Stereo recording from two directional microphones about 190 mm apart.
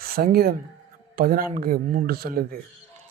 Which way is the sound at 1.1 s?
50° right (ahead or behind).